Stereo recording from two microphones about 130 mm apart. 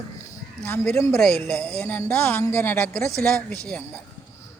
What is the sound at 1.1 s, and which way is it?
Speech, 5° left (ahead or behind).